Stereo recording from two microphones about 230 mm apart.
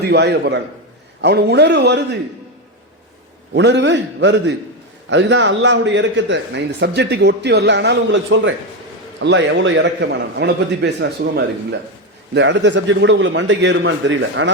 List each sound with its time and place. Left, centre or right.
0.0 s a man's voice: right
3.5 s a man's voice: right